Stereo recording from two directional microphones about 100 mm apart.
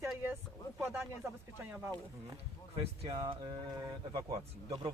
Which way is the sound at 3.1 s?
55° right (ahead or behind).